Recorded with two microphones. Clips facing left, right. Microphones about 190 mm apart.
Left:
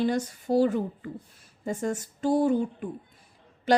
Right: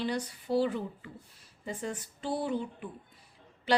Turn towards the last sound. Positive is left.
turn(degrees=45)  # may be behind; listen again after turning